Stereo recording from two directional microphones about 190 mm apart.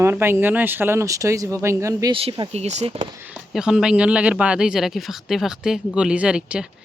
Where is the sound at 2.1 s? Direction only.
30° right (ahead or behind).